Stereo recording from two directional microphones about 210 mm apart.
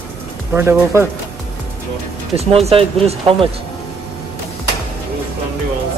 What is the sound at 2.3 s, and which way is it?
Speech, 30° right (ahead or behind).